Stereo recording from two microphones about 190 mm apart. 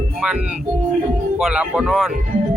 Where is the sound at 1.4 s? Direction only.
5° right (ahead or behind).